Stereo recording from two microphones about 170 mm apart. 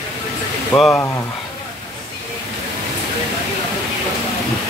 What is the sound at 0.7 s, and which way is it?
Speech, centre (ahead or behind).